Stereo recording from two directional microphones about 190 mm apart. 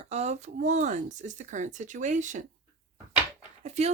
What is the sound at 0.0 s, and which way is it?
Speech, 35° right (ahead or behind).